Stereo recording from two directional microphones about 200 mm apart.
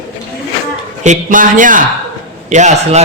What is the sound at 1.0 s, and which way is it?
Speech, 40° right (ahead or behind).